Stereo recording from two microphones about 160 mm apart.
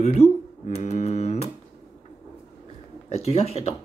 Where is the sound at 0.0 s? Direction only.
40° left (ahead or behind).